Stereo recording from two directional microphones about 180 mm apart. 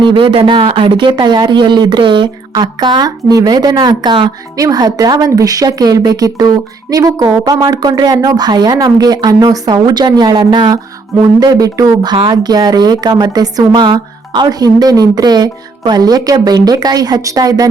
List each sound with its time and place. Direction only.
0.0 s speech: 30° right (ahead or behind)